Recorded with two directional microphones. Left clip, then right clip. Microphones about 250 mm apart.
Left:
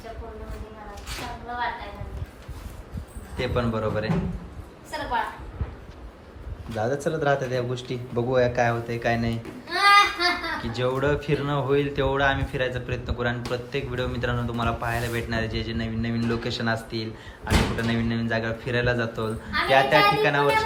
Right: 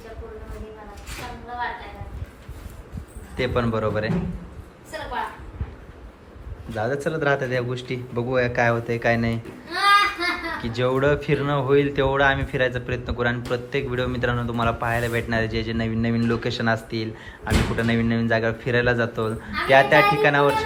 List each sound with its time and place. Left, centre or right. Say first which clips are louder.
3.3 s a man's voice: right 3 dB; centre
4.9 s a sound: left 3 dB; centre
6.7 s a man's voice: right 1 dB; centre